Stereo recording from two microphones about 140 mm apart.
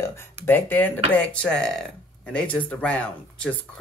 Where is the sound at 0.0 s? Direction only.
20° left (ahead or behind).